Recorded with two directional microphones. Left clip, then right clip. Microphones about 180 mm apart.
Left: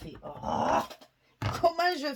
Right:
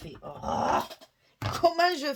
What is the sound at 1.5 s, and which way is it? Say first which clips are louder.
Speech: right 2 dB; 45° right (ahead or behind).